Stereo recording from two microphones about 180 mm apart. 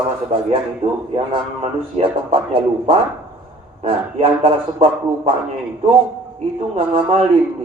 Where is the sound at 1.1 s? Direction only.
35° right (ahead or behind).